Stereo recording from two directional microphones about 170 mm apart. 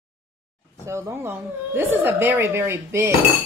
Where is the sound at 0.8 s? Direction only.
15° right (ahead or behind).